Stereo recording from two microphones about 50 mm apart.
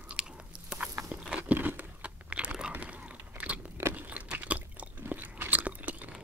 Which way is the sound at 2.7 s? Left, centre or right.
Right.